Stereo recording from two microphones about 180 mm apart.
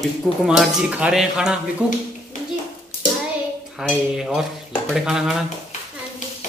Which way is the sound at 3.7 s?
5° right (ahead or behind).